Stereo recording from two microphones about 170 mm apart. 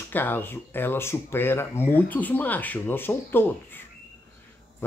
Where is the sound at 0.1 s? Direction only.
10° left (ahead or behind).